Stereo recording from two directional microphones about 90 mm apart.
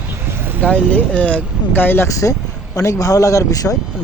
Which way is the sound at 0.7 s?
15° left (ahead or behind).